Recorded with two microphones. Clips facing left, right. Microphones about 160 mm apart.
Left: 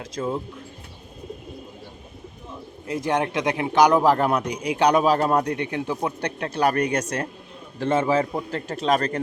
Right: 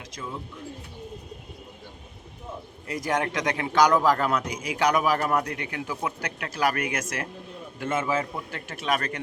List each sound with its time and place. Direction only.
0.0 s speech: 50° left (ahead or behind)
2.9 s a man's voice: 25° left (ahead or behind)